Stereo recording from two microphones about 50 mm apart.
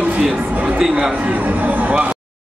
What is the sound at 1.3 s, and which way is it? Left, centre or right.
Speech, right.